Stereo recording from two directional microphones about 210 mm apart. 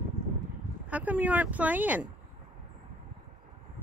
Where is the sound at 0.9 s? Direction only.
5° right (ahead or behind).